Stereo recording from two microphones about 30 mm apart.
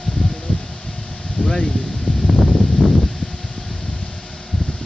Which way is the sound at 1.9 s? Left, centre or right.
Left.